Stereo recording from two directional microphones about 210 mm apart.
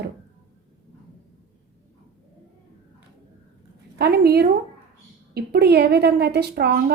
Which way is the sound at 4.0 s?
50° right (ahead or behind).